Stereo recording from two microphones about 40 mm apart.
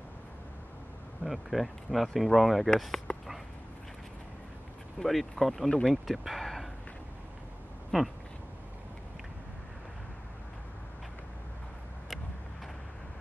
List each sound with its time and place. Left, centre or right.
1.2 s speech: centre
3.1 s dog: left
4.9 s speech: centre
5.7 s speech: centre
6.0 s a sound: centre
7.9 s speech: centre